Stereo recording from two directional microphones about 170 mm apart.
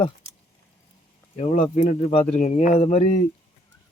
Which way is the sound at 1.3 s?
40° left (ahead or behind).